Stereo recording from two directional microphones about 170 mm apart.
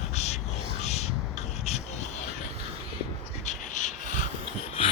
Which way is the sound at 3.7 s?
50° left (ahead or behind).